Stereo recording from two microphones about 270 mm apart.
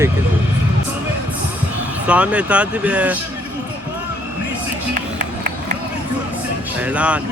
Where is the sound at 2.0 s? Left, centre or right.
Centre.